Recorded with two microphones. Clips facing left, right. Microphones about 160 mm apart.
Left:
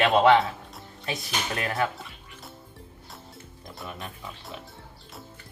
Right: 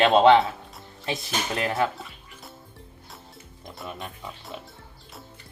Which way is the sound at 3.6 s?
Centre (ahead or behind).